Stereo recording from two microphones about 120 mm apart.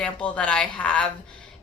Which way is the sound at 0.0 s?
10° left (ahead or behind).